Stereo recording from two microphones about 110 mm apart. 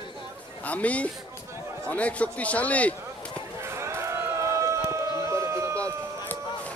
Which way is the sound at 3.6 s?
25° right (ahead or behind).